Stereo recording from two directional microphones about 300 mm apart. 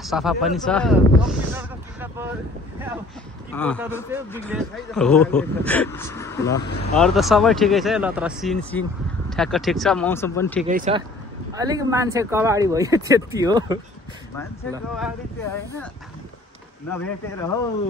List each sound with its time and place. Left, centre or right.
0.0 s speech: centre
3.5 s a man's voice: centre
7.0 s speech: centre
10.7 s speech: right
11.5 s speech: centre
16.9 s a man's voice: centre